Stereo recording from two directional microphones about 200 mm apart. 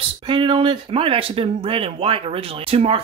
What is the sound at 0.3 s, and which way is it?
Speech, 25° right (ahead or behind).